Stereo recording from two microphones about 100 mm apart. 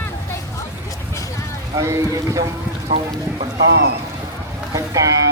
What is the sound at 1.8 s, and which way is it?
Speech, 30° right (ahead or behind).